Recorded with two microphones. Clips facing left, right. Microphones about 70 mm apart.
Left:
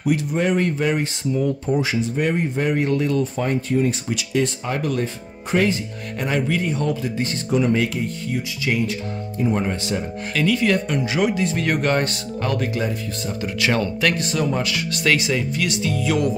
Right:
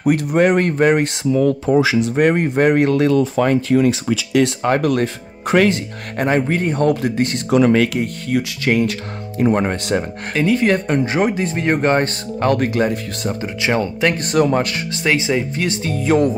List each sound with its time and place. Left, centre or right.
0.0 s speech: right
1.4 s speech: right
4.7 s speech: right
6.1 s speech: right
10.3 s speech: right
12.4 s speech: right
13.4 s speech: right
14.1 s speech: right
14.9 s speech: right